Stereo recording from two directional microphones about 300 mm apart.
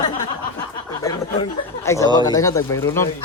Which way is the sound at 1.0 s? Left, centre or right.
Centre.